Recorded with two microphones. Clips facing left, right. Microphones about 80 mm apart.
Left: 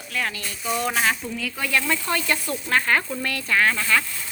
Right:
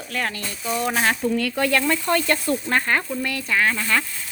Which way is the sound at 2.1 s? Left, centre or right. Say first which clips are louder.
Right 6 dB; right.